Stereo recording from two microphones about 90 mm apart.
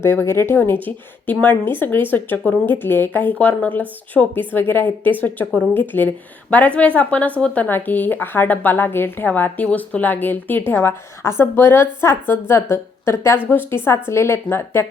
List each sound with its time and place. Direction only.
0.0 s speech: 30° left (ahead or behind)